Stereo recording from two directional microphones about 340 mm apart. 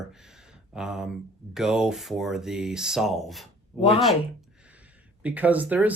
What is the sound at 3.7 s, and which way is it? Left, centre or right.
Speech, centre.